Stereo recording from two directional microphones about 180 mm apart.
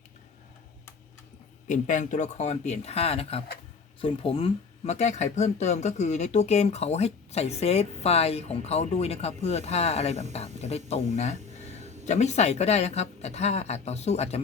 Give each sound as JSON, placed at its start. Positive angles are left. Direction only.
{"t": 1.6, "sound": "speech", "side_deg": 45}